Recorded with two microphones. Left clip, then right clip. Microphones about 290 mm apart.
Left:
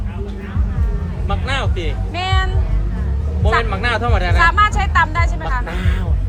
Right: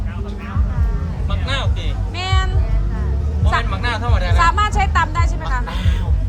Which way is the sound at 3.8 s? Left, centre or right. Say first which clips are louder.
Left 4 dB; left.